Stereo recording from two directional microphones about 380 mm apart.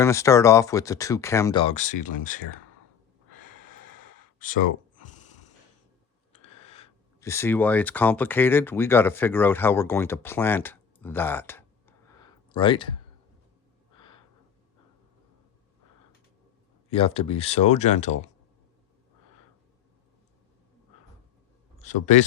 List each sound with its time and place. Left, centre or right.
0.0 s speech: centre
4.4 s speech: left
6.5 s speech: centre
16.9 s speech: centre
21.8 s speech: centre